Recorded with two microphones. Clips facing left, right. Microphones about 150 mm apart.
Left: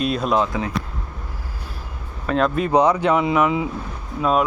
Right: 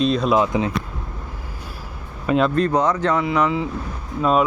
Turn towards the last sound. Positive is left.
turn(degrees=0)  # may be behind; listen again after turning